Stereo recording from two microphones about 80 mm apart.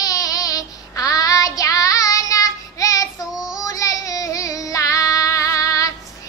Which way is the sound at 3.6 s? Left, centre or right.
Left.